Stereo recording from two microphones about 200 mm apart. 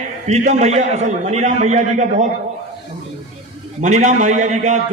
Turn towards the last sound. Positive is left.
turn(degrees=-35)  # may be behind; listen again after turning